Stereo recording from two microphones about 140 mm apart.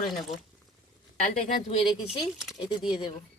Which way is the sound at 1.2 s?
70° left (ahead or behind).